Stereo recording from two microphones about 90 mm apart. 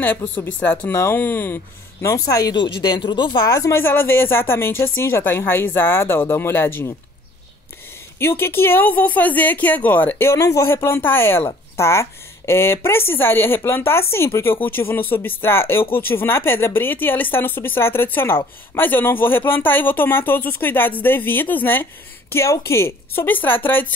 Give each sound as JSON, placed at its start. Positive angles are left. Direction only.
{"t": 0.0, "sound": "a woman's voice", "side_deg": 20}
{"t": 2.0, "sound": "speech", "side_deg": 40}
{"t": 2.5, "sound": "speech", "side_deg": 65}
{"t": 3.7, "sound": "a woman's voice", "side_deg": 25}
{"t": 8.2, "sound": "a woman's voice", "side_deg": 25}